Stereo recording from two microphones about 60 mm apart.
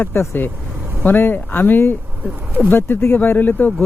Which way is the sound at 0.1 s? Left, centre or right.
Left.